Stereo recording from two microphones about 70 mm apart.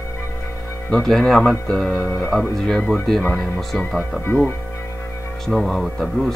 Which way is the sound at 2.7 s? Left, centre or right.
Centre.